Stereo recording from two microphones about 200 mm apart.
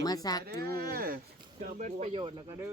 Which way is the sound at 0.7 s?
50° right (ahead or behind).